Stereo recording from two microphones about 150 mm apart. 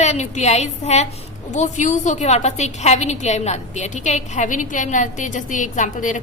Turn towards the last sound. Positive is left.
turn(degrees=55)  # may be behind; listen again after turning